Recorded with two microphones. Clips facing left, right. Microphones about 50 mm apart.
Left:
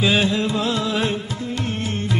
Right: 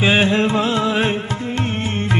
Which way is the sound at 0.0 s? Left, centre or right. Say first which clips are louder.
Right 4 dB; right.